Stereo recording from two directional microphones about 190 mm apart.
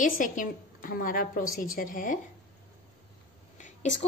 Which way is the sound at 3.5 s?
40° left (ahead or behind).